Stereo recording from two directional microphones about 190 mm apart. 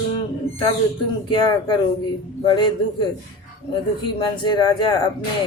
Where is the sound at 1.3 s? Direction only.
25° left (ahead or behind).